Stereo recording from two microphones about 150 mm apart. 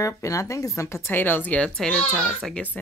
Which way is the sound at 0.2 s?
20° left (ahead or behind).